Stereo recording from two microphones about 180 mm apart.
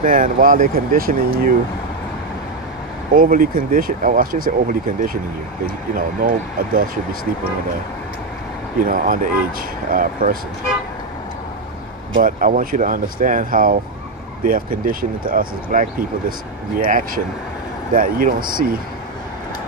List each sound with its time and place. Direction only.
0.0 s speech: 50° right (ahead or behind)
3.2 s speech: 50° right (ahead or behind)
8.7 s speech: 50° right (ahead or behind)
12.2 s speech: 50° right (ahead or behind)